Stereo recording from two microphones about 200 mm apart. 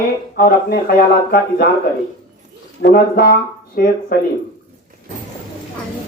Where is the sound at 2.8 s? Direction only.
50° left (ahead or behind).